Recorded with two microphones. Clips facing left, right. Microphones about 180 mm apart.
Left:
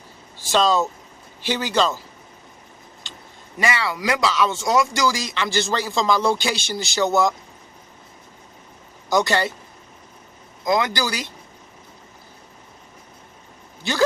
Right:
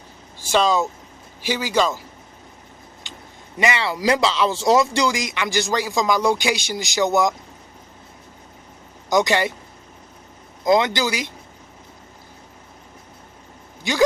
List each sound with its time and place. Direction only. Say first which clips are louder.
0.3 s speech: even; 15° right (ahead or behind)
3.6 s speech: right 2 dB; 25° right (ahead or behind)
9.0 s speech: right 1 dB; 15° right (ahead or behind)
10.7 s speech: right 3 dB; 25° right (ahead or behind)